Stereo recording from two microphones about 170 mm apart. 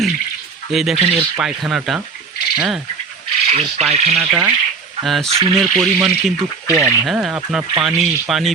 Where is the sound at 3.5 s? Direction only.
40° right (ahead or behind).